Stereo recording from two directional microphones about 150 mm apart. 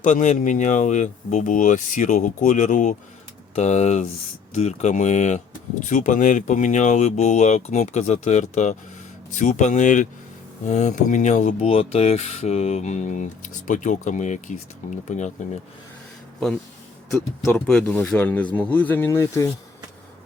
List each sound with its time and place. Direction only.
0.0 s speech: 55° left (ahead or behind)
17.1 s speech: centre (ahead or behind); by 19.5 s 20° left (ahead or behind)